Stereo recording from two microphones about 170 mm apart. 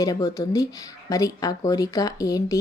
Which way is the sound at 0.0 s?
20° left (ahead or behind).